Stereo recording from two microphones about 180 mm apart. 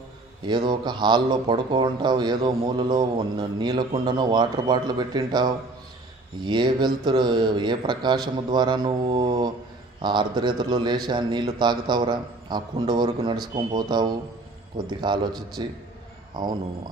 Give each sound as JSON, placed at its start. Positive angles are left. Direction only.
{"t": 0.5, "sound": "speech", "side_deg": -25}